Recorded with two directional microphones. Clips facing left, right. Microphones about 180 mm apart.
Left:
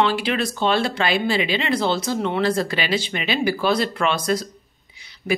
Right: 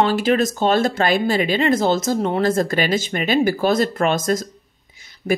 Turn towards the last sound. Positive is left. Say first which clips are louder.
# right 3 dB
turn(degrees=-45)  # may be behind; listen again after turning